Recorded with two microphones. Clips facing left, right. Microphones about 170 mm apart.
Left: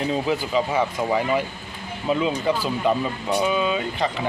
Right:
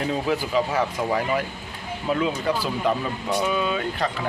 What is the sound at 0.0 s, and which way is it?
Speech, centre (ahead or behind).